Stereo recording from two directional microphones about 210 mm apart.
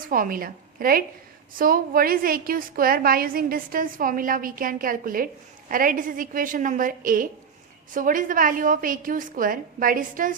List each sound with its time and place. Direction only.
0.1 s a woman's voice: 40° right (ahead or behind)